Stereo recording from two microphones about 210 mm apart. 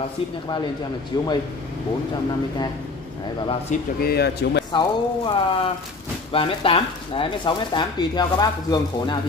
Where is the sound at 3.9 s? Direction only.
50° left (ahead or behind).